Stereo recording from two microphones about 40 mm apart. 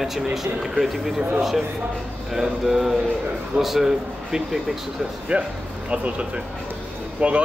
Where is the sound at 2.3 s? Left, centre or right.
Centre.